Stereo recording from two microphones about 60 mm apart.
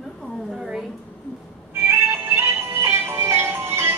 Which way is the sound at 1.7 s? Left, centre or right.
Right.